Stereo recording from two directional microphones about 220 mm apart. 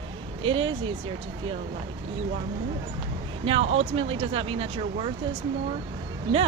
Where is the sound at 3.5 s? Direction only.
25° right (ahead or behind).